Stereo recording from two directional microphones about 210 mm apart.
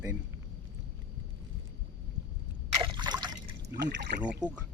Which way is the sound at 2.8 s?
20° right (ahead or behind).